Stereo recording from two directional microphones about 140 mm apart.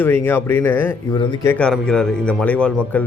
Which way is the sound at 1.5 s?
5° left (ahead or behind).